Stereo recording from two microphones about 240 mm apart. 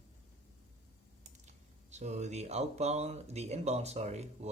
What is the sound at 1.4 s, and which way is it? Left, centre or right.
Speech, right.